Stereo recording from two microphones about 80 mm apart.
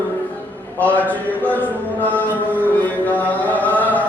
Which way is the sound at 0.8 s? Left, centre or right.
Centre.